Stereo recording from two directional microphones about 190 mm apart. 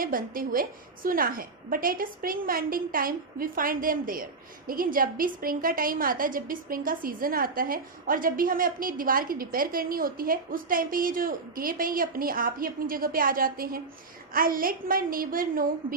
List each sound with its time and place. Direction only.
0.0 s a woman's voice: 50° right (ahead or behind)